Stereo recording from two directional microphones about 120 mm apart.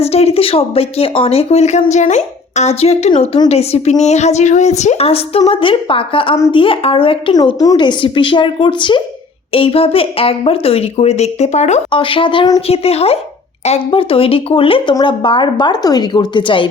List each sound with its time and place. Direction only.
0.0 s a woman's voice: 60° left (ahead or behind)
7.4 s a woman's voice: 35° left (ahead or behind); by 11.8 s 70° left (ahead or behind)
11.9 s a woman's voice: 45° left (ahead or behind)
12.5 s a woman's voice: 55° left (ahead or behind)